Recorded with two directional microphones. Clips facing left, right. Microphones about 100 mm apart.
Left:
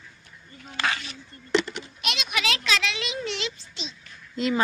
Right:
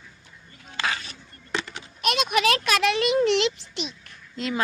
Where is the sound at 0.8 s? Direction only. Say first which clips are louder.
Left 1 dB; 30° right (ahead or behind).